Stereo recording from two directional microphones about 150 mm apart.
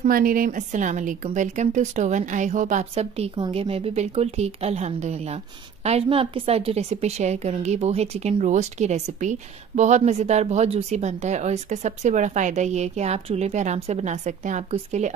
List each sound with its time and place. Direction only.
0.1 s a woman's voice: 70° right (ahead or behind); by 15.1 s 50° right (ahead or behind)